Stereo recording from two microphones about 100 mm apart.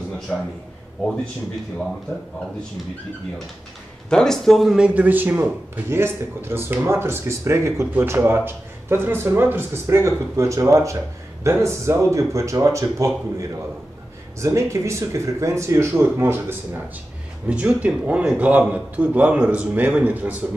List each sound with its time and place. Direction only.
4.1 s a man's voice: 5° left (ahead or behind); by 16.8 s 25° right (ahead or behind)
17.5 s speech: 10° right (ahead or behind)